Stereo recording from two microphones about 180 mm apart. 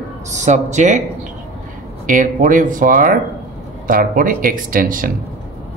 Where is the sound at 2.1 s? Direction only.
45° right (ahead or behind).